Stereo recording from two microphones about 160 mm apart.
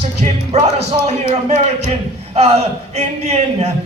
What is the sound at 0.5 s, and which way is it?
Speech, 45° right (ahead or behind).